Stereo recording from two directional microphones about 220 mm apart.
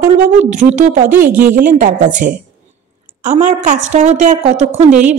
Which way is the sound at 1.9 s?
35° right (ahead or behind).